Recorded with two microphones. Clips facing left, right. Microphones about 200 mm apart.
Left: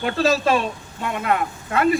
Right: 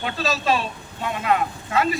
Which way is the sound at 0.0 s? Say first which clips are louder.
Left 6 dB; 55° left (ahead or behind).